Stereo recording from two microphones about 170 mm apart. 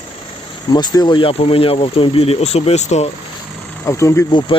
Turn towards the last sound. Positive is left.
turn(degrees=15)  # may be behind; listen again after turning